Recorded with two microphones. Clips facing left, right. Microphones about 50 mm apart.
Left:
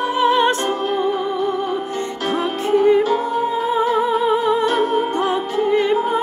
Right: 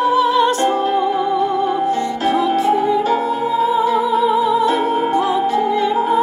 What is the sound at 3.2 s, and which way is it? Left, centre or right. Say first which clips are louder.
Music: right 1 dB; right.